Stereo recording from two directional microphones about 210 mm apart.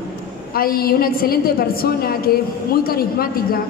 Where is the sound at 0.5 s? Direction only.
45° left (ahead or behind).